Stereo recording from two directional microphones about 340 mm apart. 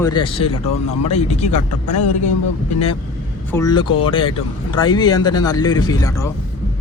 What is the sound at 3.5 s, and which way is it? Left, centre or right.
Speech, centre.